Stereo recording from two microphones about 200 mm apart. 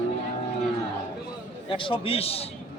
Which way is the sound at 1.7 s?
25° left (ahead or behind).